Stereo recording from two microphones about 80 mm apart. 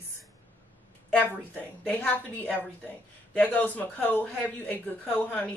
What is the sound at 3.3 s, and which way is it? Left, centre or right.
A woman's voice, left.